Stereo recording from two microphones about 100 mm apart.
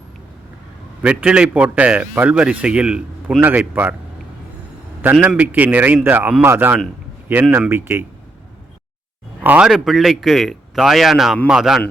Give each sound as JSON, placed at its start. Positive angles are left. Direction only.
{"t": 1.0, "sound": "a man's voice", "side_deg": -10}
{"t": 5.4, "sound": "a man's voice", "side_deg": -15}
{"t": 9.4, "sound": "a man's voice", "side_deg": -15}
{"t": 9.6, "sound": "a man's voice", "side_deg": -5}